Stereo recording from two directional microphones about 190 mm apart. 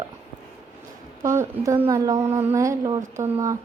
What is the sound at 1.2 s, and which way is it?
A woman's voice, 15° right (ahead or behind).